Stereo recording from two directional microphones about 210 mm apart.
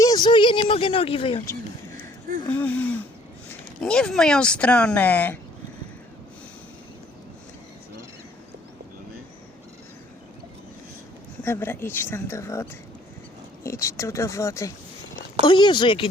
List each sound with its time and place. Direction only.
0.0 s speech: 20° left (ahead or behind)
2.5 s a woman's voice: 5° left (ahead or behind)
11.4 s a woman's voice: 10° left (ahead or behind)
13.7 s a woman's voice: 15° left (ahead or behind)